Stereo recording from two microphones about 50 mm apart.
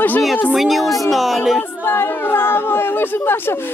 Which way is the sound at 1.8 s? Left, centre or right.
Left.